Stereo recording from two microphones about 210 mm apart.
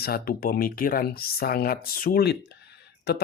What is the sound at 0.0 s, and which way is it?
Speech, 45° left (ahead or behind).